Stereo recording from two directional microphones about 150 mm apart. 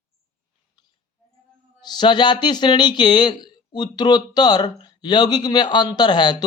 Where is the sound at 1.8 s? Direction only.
30° left (ahead or behind).